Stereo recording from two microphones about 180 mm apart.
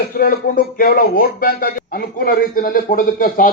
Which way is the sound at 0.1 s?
50° left (ahead or behind).